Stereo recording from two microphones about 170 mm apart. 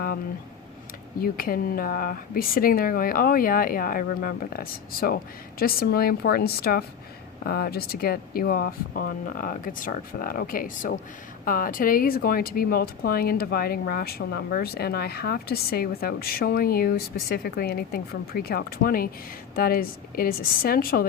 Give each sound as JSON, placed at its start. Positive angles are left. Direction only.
{"t": 1.2, "sound": "speech", "side_deg": 60}